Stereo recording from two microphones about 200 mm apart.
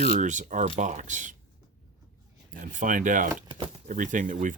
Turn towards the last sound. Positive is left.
turn(degrees=-40)  # may be behind; listen again after turning